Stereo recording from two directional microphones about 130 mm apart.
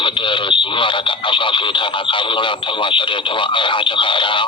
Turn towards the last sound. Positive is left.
turn(degrees=40)  # may be behind; listen again after turning